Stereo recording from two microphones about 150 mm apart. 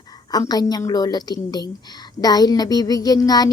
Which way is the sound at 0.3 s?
25° left (ahead or behind).